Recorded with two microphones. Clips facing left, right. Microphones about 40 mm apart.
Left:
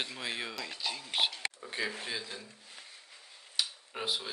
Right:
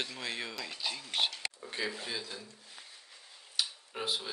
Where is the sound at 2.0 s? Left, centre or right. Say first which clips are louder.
Left 1 dB; left.